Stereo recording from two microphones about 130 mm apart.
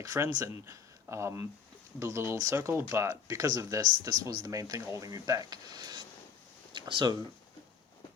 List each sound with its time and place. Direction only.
0.0 s speech: 25° right (ahead or behind)